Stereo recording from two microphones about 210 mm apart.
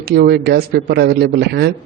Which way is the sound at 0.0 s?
50° right (ahead or behind).